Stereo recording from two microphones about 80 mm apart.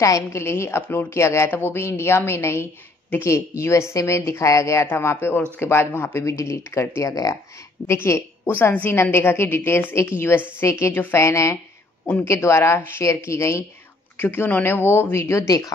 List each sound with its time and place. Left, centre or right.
0.0 s a woman's voice: left
4.8 s a woman's voice: left
7.8 s a woman's voice: left
11.2 s a woman's voice: left
14.1 s a woman's voice: left